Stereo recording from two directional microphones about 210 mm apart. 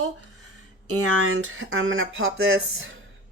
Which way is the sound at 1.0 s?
90° right.